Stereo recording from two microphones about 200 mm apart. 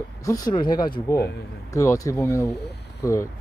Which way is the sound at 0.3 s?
20° left (ahead or behind).